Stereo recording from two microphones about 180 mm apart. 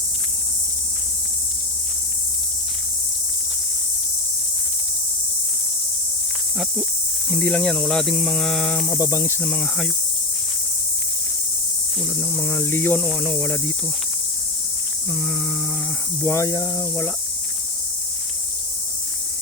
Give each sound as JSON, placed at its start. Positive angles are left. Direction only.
{"t": 7.3, "sound": "speech", "side_deg": 5}
{"t": 9.0, "sound": "speech", "side_deg": 20}
{"t": 12.2, "sound": "speech", "side_deg": 15}
{"t": 15.1, "sound": "speech", "side_deg": 0}
{"t": 16.2, "sound": "speech", "side_deg": 15}